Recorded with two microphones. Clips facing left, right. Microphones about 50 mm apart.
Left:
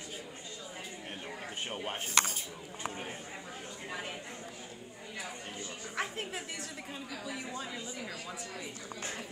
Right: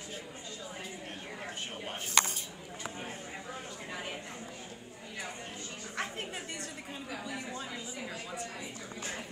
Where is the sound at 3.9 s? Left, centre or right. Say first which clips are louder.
Left 1 dB; centre.